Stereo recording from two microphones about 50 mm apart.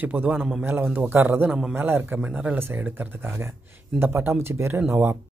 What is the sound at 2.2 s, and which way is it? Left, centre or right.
Speech, right.